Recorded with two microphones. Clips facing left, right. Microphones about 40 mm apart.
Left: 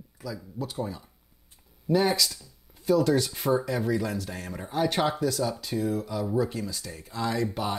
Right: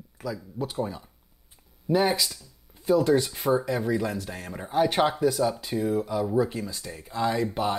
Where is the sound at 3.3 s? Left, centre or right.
Centre.